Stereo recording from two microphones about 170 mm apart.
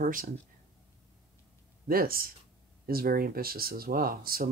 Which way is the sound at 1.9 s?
60° right (ahead or behind).